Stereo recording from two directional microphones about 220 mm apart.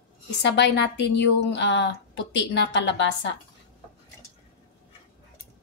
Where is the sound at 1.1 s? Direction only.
55° left (ahead or behind).